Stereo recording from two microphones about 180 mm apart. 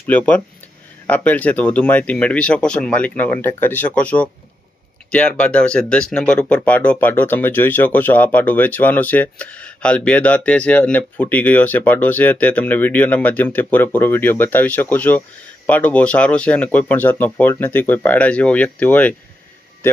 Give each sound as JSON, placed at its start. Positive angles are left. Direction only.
{"t": 0.1, "sound": "speech", "side_deg": 10}